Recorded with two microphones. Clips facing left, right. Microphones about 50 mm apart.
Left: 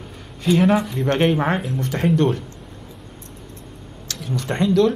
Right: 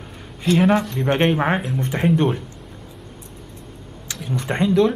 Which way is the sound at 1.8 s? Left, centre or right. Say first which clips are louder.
Right 1 dB; right.